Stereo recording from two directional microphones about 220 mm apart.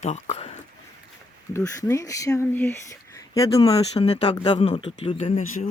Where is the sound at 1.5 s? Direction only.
10° left (ahead or behind).